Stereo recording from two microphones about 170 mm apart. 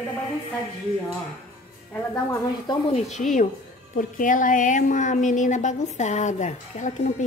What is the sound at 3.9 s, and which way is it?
A woman's voice, 50° left (ahead or behind).